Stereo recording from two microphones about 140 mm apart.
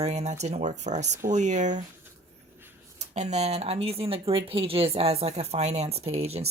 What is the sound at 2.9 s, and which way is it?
Speech, 55° right (ahead or behind).